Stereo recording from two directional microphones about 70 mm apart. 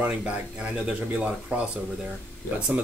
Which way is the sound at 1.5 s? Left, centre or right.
Centre.